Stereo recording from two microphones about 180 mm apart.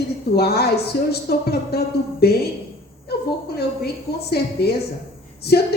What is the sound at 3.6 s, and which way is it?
A woman's voice, 60° left (ahead or behind).